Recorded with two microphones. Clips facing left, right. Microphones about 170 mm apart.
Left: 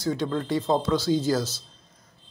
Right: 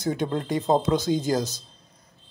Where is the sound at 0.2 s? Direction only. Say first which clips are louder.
Even; 20° right (ahead or behind).